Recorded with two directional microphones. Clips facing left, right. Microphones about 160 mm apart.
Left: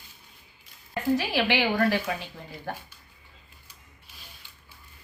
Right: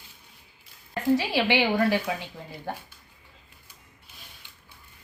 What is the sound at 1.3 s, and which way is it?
Speech, 15° right (ahead or behind).